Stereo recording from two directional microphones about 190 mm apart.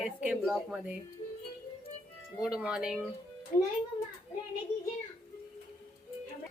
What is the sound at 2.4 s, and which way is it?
Speech, 5° right (ahead or behind).